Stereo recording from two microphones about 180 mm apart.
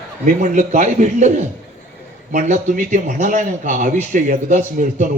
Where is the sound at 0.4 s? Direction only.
40° right (ahead or behind).